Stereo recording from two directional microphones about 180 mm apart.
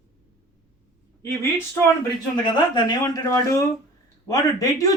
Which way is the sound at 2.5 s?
25° left (ahead or behind).